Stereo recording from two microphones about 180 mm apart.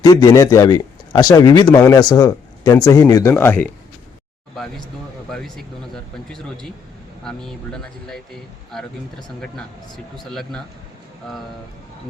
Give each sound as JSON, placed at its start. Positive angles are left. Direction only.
{"t": 0.0, "sound": "speech", "side_deg": 20}
{"t": 5.3, "sound": "speech", "side_deg": 0}
{"t": 7.3, "sound": "speech", "side_deg": 5}